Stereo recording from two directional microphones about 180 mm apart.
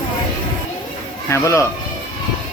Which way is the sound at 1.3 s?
15° left (ahead or behind).